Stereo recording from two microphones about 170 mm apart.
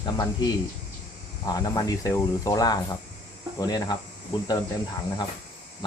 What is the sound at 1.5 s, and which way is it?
Speech, 20° left (ahead or behind).